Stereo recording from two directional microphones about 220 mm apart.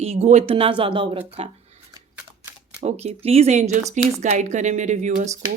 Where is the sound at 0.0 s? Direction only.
30° right (ahead or behind).